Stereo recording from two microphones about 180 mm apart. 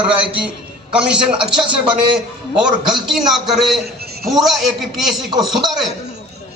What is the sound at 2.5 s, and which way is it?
A man's voice, 5° right (ahead or behind).